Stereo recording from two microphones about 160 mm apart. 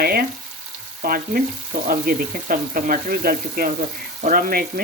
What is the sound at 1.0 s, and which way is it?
Speech, 65° right (ahead or behind).